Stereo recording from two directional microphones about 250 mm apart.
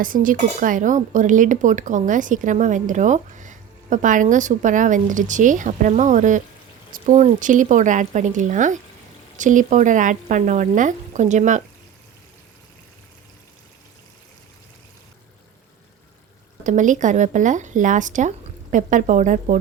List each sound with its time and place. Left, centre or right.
0.0 s speech: right
16.6 s speech: right